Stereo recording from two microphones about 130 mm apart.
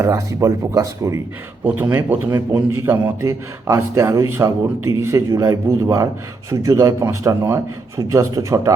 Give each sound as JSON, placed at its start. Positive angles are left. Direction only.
{"t": 0.0, "sound": "a man's voice", "side_deg": -25}